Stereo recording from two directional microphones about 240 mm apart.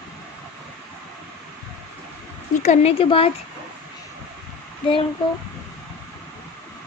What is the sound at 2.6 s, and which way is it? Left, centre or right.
Speech, left.